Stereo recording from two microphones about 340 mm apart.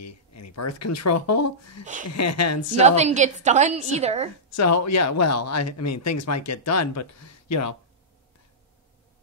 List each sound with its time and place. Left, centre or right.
0.0 s speech: left
2.8 s a woman's voice: centre
4.5 s speech: left